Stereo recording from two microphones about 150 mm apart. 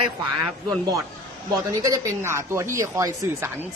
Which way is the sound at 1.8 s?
20° right (ahead or behind).